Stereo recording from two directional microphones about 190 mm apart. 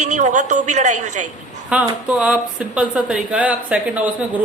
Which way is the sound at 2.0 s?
5° right (ahead or behind).